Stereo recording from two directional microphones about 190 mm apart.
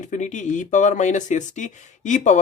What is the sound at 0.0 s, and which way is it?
Speech, 40° left (ahead or behind).